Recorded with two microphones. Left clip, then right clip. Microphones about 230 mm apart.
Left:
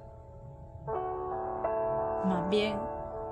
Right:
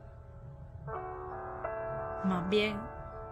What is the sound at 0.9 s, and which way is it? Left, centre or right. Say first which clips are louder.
Music: left 6 dB; left.